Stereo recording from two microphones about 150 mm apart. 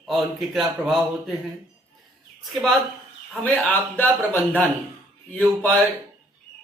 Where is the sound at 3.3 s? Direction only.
10° left (ahead or behind).